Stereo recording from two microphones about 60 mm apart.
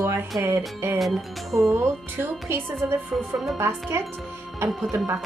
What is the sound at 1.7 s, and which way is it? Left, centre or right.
Speech, right.